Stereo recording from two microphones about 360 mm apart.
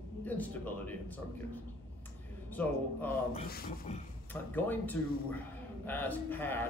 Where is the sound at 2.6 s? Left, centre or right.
Centre.